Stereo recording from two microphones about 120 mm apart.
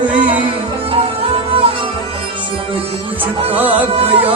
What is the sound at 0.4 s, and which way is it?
Music, 55° right (ahead or behind).